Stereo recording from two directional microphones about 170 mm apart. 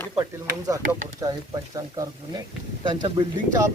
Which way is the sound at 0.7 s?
20° right (ahead or behind).